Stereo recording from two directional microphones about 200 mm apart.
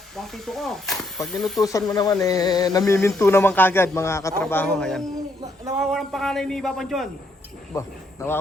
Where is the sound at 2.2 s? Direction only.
20° left (ahead or behind).